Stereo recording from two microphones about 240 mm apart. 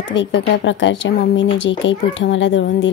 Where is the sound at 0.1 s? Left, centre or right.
Left.